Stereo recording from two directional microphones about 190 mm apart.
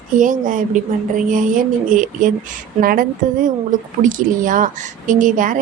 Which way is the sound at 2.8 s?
50° right (ahead or behind).